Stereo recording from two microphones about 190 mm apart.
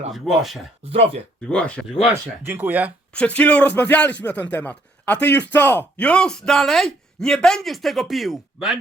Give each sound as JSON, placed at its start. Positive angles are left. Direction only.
{"t": 0.1, "sound": "speech", "side_deg": 0}
{"t": 0.9, "sound": "speech", "side_deg": -30}
{"t": 1.5, "sound": "speech", "side_deg": 5}
{"t": 2.5, "sound": "speech", "side_deg": -10}
{"t": 3.2, "sound": "speech", "side_deg": 5}